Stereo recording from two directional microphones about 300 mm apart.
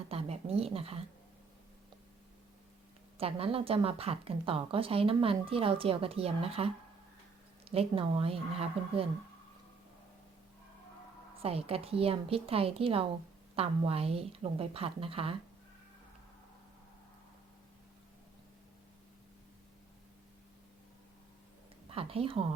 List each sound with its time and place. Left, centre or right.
0.1 s a sound: centre
3.2 s speech: centre
11.4 s speech: centre
21.8 s a woman's voice: centre